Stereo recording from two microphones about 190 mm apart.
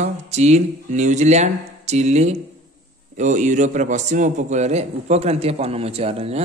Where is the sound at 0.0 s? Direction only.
35° right (ahead or behind).